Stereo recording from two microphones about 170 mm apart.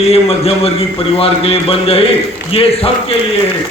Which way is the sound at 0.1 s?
35° left (ahead or behind).